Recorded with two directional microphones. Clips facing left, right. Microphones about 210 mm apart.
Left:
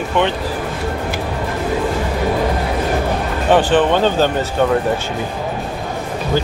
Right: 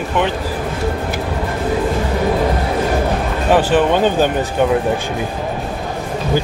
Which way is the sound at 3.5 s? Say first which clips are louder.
Even; 10° right (ahead or behind).